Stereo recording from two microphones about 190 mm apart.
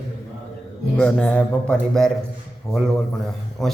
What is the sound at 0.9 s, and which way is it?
A man's voice, 5° left (ahead or behind).